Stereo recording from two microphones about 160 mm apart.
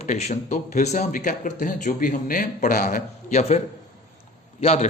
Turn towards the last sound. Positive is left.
turn(degrees=40)  # may be behind; listen again after turning